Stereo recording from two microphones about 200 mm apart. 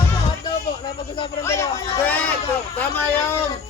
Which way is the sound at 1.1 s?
25° left (ahead or behind).